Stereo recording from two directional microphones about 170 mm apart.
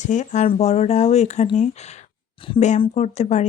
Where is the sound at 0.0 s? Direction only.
45° left (ahead or behind).